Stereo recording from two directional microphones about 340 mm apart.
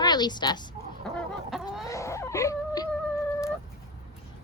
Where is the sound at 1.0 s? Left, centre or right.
Centre.